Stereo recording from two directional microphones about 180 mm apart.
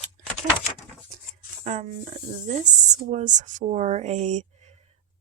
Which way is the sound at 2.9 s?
40° right (ahead or behind).